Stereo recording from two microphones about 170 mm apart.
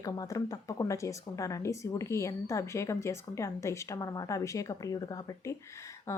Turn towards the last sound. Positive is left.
turn(degrees=15)  # may be behind; listen again after turning